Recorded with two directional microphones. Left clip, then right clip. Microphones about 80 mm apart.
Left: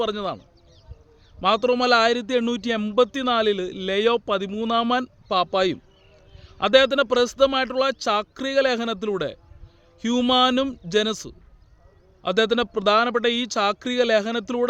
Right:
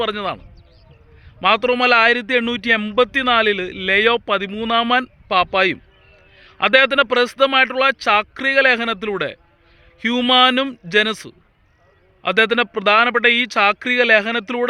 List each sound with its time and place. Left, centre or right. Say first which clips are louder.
0.0 s a man's voice: right 4 dB; centre
1.4 s a man's voice: right 4 dB; centre